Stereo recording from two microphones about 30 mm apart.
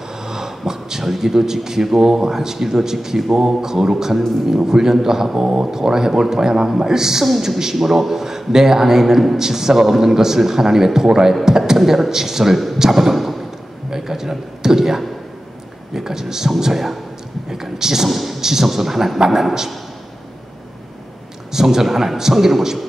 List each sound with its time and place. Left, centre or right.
0.2 s a sound: centre
1.0 s a man's voice: centre
7.7 s a man's voice: centre
13.8 s a man's voice: centre
17.5 s a sound: centre
18.0 s a man's voice: centre
21.5 s a man's voice: centre